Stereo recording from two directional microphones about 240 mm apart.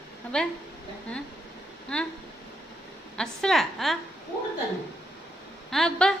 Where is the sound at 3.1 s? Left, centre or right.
Centre.